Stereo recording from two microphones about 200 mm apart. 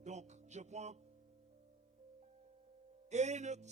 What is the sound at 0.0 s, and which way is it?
Music, 35° right (ahead or behind).